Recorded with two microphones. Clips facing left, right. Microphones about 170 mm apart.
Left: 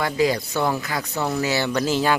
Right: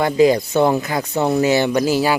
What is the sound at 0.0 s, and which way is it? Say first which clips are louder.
Speech: right 7 dB; 20° right (ahead or behind).